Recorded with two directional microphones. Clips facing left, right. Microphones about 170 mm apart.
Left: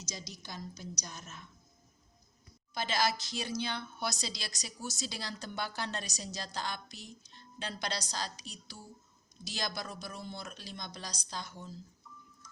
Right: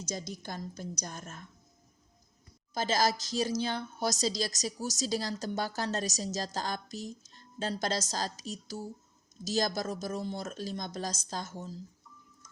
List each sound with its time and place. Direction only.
0.0 s a woman's voice: 50° right (ahead or behind)
2.7 s a woman's voice: 40° right (ahead or behind)